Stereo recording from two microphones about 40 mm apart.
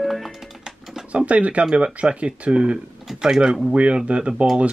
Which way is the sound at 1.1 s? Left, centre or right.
Right.